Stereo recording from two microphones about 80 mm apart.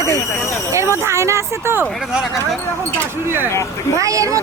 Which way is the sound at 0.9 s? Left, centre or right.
Right.